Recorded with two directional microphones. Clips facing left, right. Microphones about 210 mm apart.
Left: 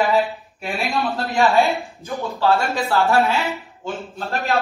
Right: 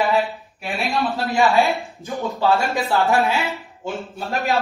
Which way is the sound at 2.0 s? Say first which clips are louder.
Even; 15° right (ahead or behind).